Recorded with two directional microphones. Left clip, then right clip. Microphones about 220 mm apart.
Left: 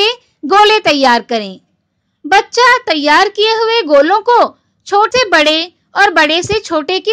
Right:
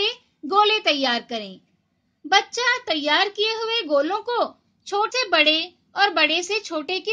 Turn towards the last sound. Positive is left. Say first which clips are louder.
# left 12 dB
turn(degrees=35)  # may be behind; listen again after turning